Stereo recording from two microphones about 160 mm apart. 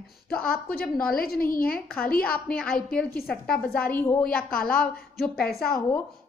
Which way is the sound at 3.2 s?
5° left (ahead or behind).